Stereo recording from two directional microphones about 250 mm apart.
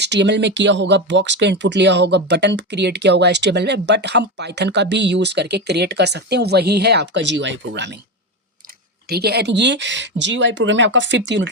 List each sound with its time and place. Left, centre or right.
0.0 s speech: right
9.0 s speech: right